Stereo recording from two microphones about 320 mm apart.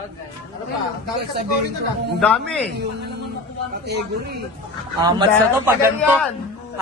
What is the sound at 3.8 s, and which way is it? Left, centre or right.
Speech, right.